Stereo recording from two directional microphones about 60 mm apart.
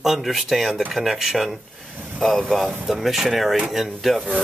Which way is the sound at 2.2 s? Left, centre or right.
Centre.